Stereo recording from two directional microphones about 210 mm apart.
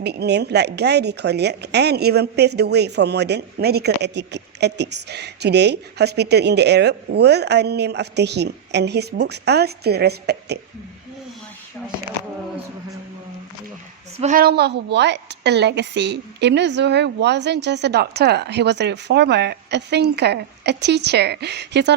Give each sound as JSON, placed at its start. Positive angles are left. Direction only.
{"t": 0.0, "sound": "speech", "side_deg": -50}
{"t": 14.2, "sound": "a woman's voice", "side_deg": -35}
{"t": 14.4, "sound": "speech", "side_deg": -50}